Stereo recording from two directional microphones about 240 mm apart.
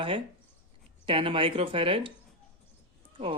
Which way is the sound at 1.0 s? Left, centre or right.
Right.